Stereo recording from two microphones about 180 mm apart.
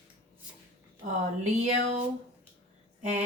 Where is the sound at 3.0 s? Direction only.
40° right (ahead or behind).